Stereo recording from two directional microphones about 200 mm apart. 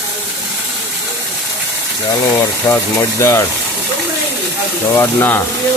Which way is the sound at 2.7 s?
15° left (ahead or behind).